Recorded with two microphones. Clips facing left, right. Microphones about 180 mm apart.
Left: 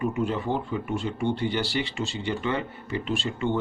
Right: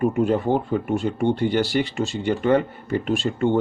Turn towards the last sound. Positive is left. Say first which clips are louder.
# right 6 dB
turn(degrees=-45)  # may be behind; listen again after turning